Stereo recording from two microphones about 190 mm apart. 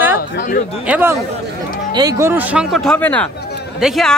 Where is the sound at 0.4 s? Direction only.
45° left (ahead or behind).